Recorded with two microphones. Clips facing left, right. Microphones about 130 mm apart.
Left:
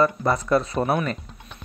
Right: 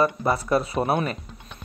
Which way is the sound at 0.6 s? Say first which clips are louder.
Even; 5° right (ahead or behind).